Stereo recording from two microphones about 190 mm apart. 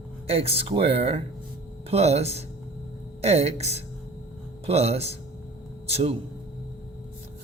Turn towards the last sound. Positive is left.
turn(degrees=-30)  # may be behind; listen again after turning